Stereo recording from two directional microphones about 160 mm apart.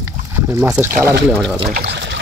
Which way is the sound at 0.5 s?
15° right (ahead or behind).